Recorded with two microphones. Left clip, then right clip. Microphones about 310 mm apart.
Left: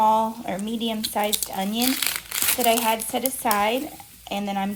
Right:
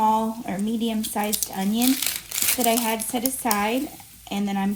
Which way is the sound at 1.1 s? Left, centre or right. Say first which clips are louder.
Left 2 dB; left.